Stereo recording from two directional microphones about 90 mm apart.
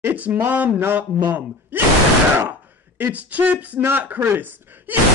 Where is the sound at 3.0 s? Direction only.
15° right (ahead or behind).